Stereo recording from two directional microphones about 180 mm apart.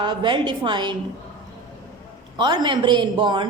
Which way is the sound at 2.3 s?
25° right (ahead or behind).